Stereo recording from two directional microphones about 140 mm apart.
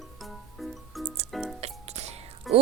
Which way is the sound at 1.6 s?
50° right (ahead or behind).